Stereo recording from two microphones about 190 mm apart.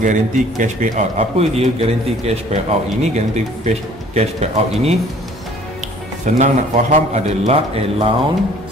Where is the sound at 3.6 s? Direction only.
35° right (ahead or behind).